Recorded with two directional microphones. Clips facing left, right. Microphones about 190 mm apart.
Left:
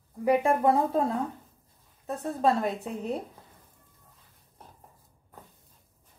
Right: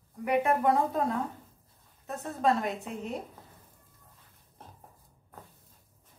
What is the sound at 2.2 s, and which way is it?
Speech, 35° left (ahead or behind).